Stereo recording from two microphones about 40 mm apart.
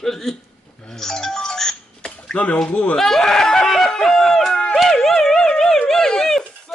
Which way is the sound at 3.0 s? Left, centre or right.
Centre.